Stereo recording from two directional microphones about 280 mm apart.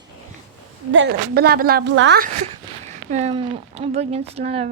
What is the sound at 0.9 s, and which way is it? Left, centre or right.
Speech, right.